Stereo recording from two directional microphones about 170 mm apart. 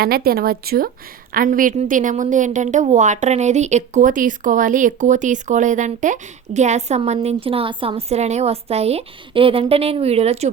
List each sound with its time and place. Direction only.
0.0 s a woman's voice: 65° right (ahead or behind); by 10.5 s 40° right (ahead or behind)